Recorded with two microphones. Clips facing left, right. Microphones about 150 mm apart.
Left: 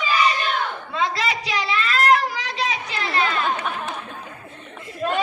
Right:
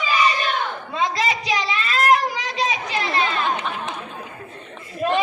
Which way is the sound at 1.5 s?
15° right (ahead or behind).